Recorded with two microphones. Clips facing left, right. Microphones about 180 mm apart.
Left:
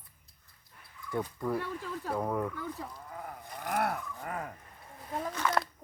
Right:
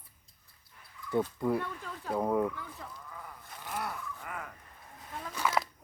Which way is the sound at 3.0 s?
50° left (ahead or behind).